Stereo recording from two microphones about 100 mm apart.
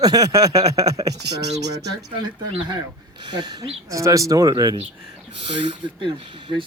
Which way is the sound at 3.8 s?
30° right (ahead or behind).